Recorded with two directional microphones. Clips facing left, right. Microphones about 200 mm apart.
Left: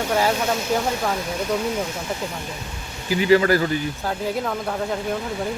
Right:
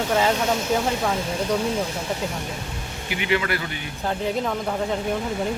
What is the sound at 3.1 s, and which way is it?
Speech, 35° left (ahead or behind).